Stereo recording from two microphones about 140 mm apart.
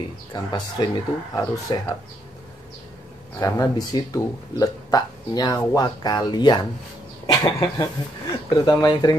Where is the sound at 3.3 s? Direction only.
25° left (ahead or behind).